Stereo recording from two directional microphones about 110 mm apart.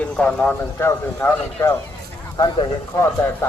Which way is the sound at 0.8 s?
25° left (ahead or behind).